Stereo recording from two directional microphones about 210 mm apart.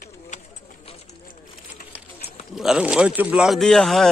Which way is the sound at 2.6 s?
5° right (ahead or behind).